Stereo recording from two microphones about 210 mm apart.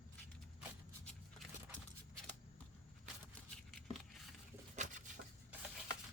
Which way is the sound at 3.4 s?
5° left (ahead or behind).